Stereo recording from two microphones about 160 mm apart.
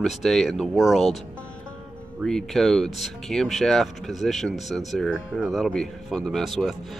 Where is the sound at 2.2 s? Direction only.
Centre (ahead or behind).